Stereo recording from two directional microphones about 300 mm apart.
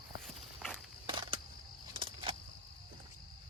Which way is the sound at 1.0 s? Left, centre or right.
Centre.